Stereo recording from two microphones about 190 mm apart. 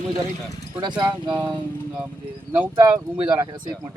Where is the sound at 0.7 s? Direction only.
20° right (ahead or behind).